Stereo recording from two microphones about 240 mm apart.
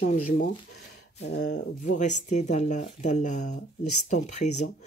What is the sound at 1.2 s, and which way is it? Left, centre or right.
Speech, left.